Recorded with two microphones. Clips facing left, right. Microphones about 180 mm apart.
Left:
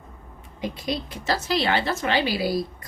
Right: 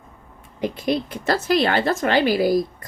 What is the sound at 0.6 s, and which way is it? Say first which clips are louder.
Speech: right 6 dB; 55° right (ahead or behind).